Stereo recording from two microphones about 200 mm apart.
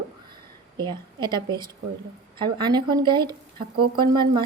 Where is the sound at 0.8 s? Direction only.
20° right (ahead or behind).